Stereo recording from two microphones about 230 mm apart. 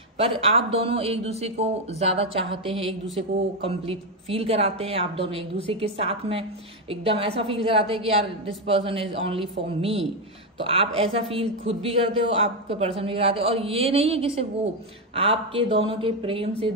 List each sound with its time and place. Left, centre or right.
0.2 s a woman's voice: right